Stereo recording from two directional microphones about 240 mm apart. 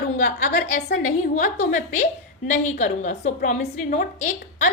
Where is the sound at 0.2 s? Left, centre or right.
Left.